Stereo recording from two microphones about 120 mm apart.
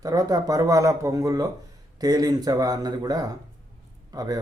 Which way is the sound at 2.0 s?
30° right (ahead or behind).